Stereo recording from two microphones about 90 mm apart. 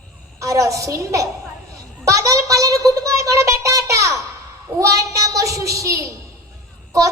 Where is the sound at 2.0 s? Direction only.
40° right (ahead or behind).